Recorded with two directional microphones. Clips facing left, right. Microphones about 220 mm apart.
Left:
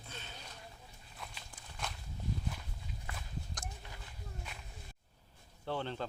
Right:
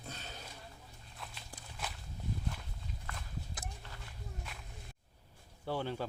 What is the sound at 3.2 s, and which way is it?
Walk, 5° right (ahead or behind).